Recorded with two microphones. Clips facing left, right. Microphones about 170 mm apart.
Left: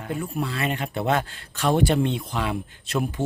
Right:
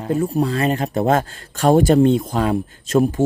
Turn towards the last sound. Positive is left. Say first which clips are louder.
# right 10 dB
turn(degrees=-40)  # may be behind; listen again after turning